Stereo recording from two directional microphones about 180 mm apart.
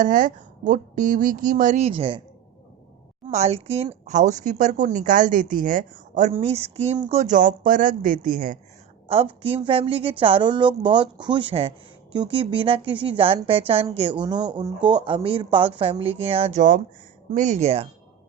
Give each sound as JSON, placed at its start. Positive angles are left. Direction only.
{"t": 0.0, "sound": "a woman's voice", "side_deg": -45}
{"t": 3.2, "sound": "a woman's voice", "side_deg": -35}
{"t": 6.3, "sound": "a woman's voice", "side_deg": -35}
{"t": 9.0, "sound": "a woman's voice", "side_deg": -30}